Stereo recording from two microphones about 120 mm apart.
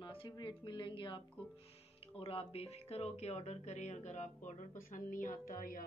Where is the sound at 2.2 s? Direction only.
55° left (ahead or behind); by 5.6 s 90° left.